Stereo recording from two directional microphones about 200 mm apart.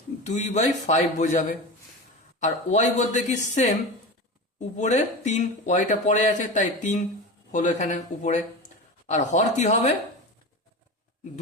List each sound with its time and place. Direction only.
0.3 s speech: 35° left (ahead or behind)
4.8 s speech: 35° left (ahead or behind)